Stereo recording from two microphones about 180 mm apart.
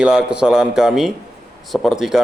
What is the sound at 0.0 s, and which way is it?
A man's voice, 5° right (ahead or behind).